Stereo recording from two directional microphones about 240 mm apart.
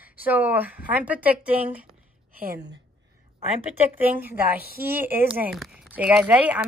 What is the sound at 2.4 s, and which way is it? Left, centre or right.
Speech, right.